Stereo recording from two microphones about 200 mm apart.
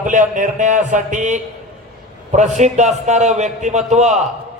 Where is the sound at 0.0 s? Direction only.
40° right (ahead or behind).